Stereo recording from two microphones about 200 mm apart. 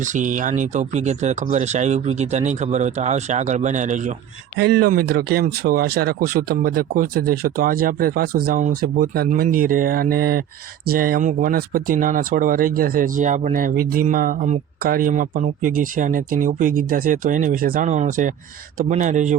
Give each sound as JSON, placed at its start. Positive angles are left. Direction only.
{"t": 0.0, "sound": "speech", "side_deg": -40}
{"t": 4.5, "sound": "speech", "side_deg": -55}